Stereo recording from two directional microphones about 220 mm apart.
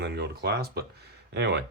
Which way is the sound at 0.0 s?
45° right (ahead or behind).